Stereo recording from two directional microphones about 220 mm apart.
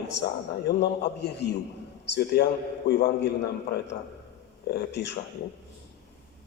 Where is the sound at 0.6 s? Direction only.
50° left (ahead or behind).